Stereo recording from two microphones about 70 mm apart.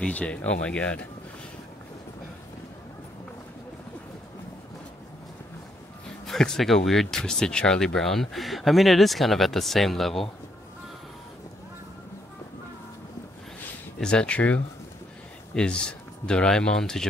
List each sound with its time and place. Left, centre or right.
0.0 s speech: centre
6.2 s speech: centre
13.9 s speech: centre